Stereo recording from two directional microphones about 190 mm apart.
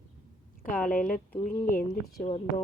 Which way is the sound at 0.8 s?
45° left (ahead or behind).